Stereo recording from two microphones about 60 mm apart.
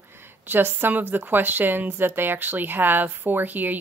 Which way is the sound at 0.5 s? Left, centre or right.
Right.